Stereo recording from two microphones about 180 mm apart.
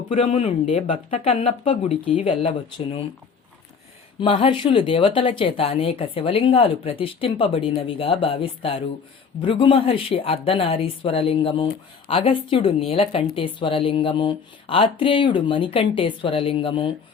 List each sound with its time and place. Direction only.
0.1 s speech: 40° left (ahead or behind)
4.2 s speech: 30° left (ahead or behind)